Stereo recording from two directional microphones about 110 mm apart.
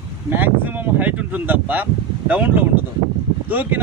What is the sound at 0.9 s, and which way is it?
Speech, 15° right (ahead or behind).